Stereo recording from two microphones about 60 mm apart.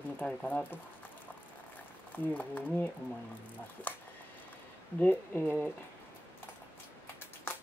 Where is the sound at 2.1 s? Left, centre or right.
Left.